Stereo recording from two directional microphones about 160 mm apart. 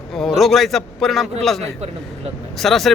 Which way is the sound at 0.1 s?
Centre (ahead or behind).